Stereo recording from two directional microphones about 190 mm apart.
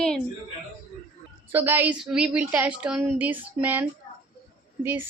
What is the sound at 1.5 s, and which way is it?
A woman's voice, 10° right (ahead or behind).